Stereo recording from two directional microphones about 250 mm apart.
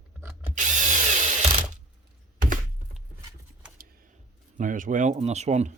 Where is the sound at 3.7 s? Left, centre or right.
Right.